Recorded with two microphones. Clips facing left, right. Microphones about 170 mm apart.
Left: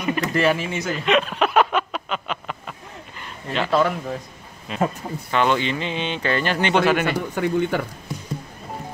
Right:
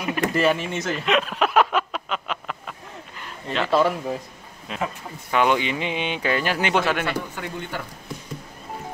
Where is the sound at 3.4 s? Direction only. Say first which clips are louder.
Even; centre (ahead or behind).